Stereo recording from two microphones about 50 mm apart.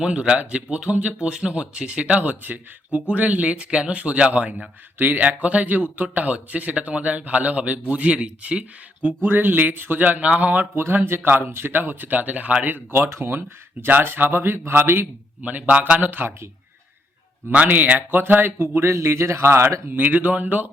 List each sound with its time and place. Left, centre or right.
0.0 s speech: centre
9.3 s speech: right
10.8 s speech: right
13.1 s speech: right
13.8 s speech: right
15.4 s speech: right
17.9 s speech: right
18.6 s speech: right
20.1 s speech: right